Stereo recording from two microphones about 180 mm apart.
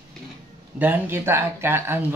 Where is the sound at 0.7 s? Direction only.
10° right (ahead or behind).